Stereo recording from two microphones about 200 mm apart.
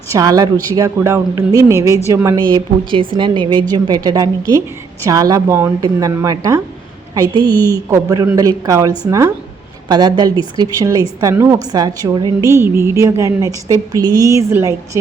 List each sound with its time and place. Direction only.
0.1 s a woman's voice: 20° right (ahead or behind)